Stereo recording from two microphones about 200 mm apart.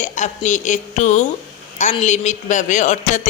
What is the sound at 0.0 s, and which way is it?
A woman's voice, 35° left (ahead or behind).